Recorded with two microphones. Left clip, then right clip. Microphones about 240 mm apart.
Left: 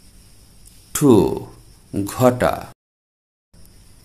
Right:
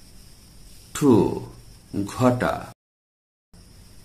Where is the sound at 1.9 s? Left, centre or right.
Left.